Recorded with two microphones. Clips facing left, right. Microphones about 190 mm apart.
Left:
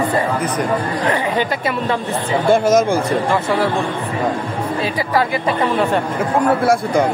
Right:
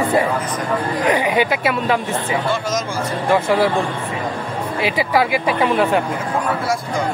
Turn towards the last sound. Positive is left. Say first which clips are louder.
# even
turn(degrees=0)  # may be behind; listen again after turning